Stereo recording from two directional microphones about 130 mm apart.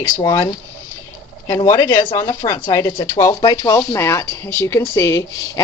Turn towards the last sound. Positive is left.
turn(degrees=25)  # may be behind; listen again after turning